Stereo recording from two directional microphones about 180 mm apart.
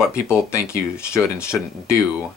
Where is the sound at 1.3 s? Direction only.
5° right (ahead or behind).